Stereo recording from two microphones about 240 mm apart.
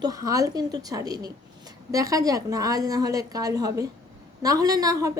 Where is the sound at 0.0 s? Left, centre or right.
Centre.